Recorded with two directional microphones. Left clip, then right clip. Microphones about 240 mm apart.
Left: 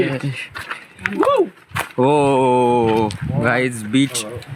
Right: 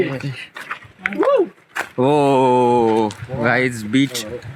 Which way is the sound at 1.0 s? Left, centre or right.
Centre.